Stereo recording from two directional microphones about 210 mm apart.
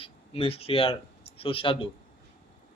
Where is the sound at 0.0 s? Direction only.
25° left (ahead or behind).